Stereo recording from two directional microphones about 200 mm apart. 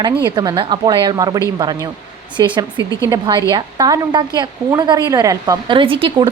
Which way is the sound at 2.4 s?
20° right (ahead or behind).